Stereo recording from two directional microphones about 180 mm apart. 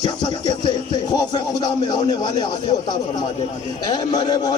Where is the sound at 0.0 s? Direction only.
25° left (ahead or behind).